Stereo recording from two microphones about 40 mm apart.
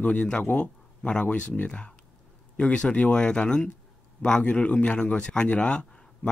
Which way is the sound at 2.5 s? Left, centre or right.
Left.